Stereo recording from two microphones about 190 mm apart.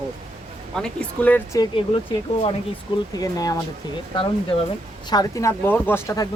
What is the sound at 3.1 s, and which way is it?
Speech, 20° left (ahead or behind).